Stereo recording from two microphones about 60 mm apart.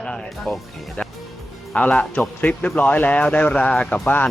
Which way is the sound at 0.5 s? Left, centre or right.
Left.